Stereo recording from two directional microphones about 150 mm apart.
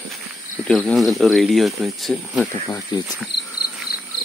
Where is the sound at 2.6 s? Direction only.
25° left (ahead or behind).